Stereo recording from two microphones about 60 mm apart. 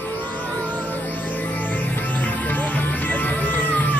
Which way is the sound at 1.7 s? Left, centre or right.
Left.